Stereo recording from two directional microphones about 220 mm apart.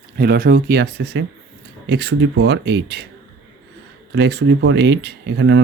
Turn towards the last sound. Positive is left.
turn(degrees=-60)  # may be behind; listen again after turning